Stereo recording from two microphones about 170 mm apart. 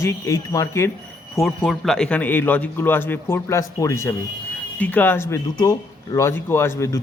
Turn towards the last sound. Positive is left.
turn(degrees=15)  # may be behind; listen again after turning